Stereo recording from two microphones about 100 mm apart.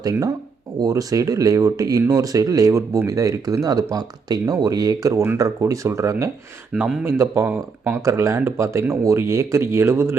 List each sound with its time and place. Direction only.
0.0 s speech: 35° right (ahead or behind)
6.7 s speech: 10° right (ahead or behind)
7.0 s speech: 25° right (ahead or behind)